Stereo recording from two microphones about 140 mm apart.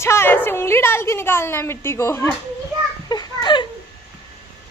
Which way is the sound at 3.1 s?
30° left (ahead or behind).